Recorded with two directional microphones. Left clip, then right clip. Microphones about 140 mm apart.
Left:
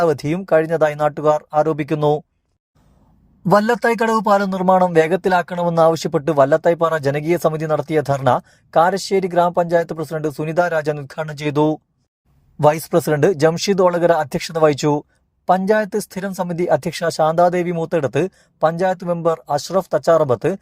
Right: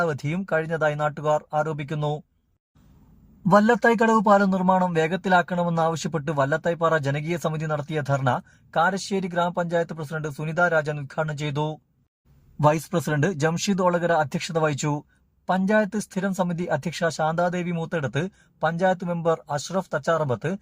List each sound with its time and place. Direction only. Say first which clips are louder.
0.0 s speech: left 8 dB; 35° left (ahead or behind)
3.5 s speech: left 3 dB; 35° left (ahead or behind)